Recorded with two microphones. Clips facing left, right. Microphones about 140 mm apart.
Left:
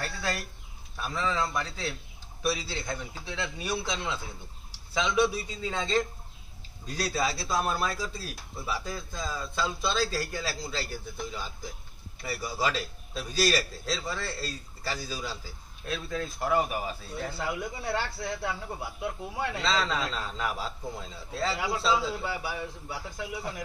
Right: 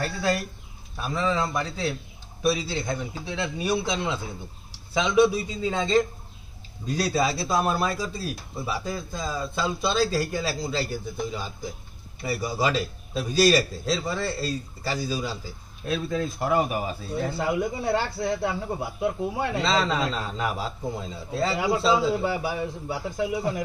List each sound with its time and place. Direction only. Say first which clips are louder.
0.0 s speech: right 7 dB; 15° right (ahead or behind)
12.2 s a man's voice: right 5 dB; 20° right (ahead or behind)